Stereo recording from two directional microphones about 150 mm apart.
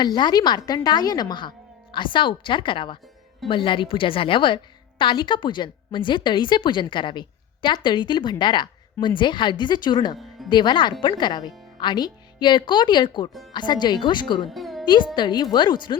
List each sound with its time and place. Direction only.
0.0 s a woman's voice: 30° left (ahead or behind)
14.4 s music: centre (ahead or behind)
15.1 s a woman's voice: 30° left (ahead or behind)